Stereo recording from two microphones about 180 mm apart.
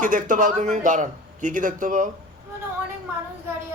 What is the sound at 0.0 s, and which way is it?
A man's voice, 45° right (ahead or behind).